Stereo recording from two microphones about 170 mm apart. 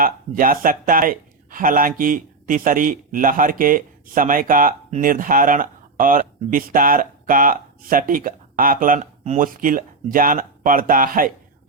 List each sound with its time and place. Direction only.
0.0 s speech: 55° right (ahead or behind)